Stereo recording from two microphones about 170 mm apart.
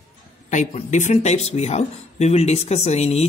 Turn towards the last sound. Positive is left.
turn(degrees=40)  # may be behind; listen again after turning